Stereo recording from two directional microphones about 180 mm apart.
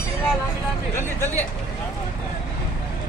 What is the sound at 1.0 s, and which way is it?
Speech, 10° left (ahead or behind).